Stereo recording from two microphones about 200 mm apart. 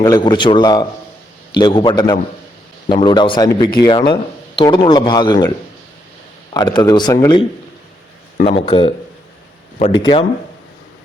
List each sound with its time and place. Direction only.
0.0 s speech: 20° left (ahead or behind)
6.5 s speech: 20° left (ahead or behind)
8.4 s speech: 30° left (ahead or behind)